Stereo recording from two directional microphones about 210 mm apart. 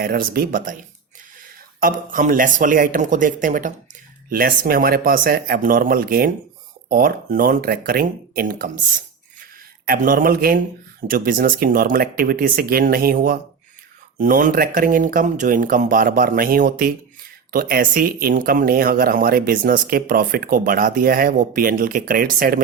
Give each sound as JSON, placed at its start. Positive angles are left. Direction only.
{"t": 0.0, "sound": "speech", "side_deg": -45}
{"t": 1.8, "sound": "speech", "side_deg": -40}
{"t": 9.8, "sound": "speech", "side_deg": -40}